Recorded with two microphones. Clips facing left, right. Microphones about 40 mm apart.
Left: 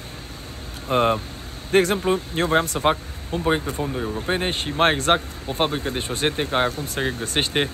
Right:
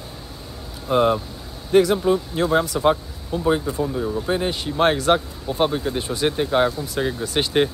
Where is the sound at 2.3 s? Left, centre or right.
Left.